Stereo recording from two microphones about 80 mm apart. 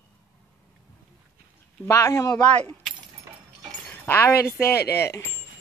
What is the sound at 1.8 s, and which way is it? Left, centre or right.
Speech, left.